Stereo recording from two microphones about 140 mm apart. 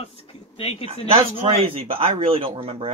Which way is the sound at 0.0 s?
45° left (ahead or behind).